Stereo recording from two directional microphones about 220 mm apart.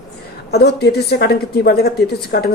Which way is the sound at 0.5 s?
50° left (ahead or behind).